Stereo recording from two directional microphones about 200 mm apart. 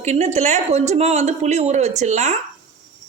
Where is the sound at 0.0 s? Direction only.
35° right (ahead or behind).